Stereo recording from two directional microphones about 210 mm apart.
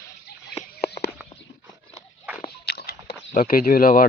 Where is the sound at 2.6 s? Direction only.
50° left (ahead or behind).